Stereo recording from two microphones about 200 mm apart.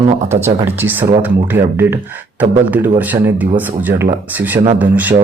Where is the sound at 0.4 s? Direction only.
10° right (ahead or behind).